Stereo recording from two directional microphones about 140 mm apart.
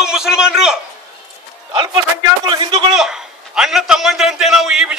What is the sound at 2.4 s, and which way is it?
Speech, 35° right (ahead or behind).